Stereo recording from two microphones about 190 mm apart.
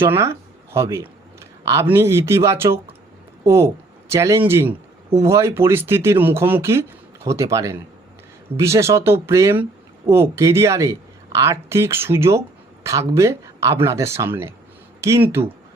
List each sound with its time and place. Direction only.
0.0 s speech: 15° right (ahead or behind)